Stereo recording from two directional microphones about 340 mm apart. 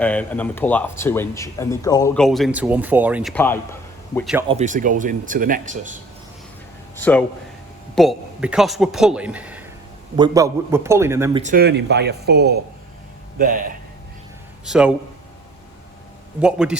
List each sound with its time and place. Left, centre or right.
0.0 s speech: centre
4.4 s speech: centre
6.9 s a man's voice: centre
11.4 s speech: right
14.6 s a man's voice: centre
16.4 s speech: centre